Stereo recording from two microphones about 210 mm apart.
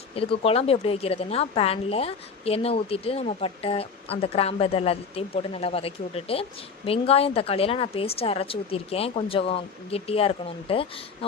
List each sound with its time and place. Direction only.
0.2 s speech: 25° left (ahead or behind)